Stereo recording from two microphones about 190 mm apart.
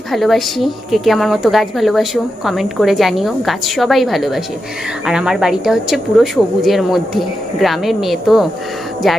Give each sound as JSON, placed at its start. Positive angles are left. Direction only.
{"t": 0.1, "sound": "a woman's voice", "side_deg": 0}